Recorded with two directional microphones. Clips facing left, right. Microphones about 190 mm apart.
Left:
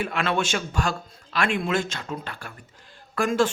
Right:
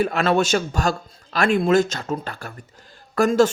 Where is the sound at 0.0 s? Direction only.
40° right (ahead or behind).